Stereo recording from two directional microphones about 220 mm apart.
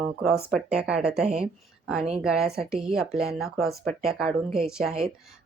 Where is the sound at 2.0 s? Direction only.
30° right (ahead or behind).